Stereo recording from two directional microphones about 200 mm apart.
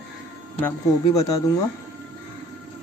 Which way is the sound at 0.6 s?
15° left (ahead or behind).